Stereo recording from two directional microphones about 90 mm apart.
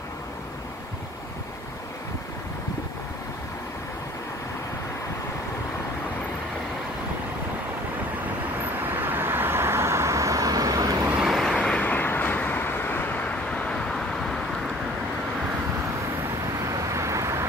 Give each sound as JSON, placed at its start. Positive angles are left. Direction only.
{"t": 8.8, "sound": "vehicle", "side_deg": -20}
{"t": 11.1, "sound": "vehicle", "side_deg": 0}
{"t": 11.5, "sound": "vehicle", "side_deg": 10}
{"t": 16.7, "sound": "vehicle", "side_deg": -35}